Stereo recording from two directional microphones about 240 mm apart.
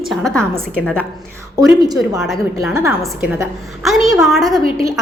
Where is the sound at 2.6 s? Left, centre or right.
Centre.